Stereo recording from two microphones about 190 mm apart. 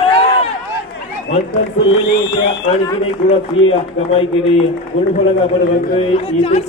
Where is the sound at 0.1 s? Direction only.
30° left (ahead or behind).